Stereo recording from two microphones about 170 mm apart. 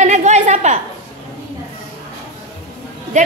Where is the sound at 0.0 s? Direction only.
45° right (ahead or behind).